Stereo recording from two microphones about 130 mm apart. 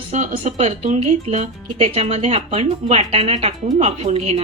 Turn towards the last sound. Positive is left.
turn(degrees=-55)  # may be behind; listen again after turning